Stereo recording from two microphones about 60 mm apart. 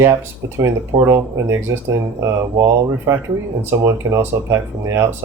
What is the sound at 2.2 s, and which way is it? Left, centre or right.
Speech, right.